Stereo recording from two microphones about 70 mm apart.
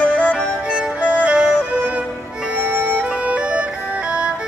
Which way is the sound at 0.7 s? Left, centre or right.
Centre.